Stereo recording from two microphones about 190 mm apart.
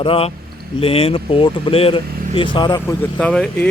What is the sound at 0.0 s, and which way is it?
Speech, 30° left (ahead or behind).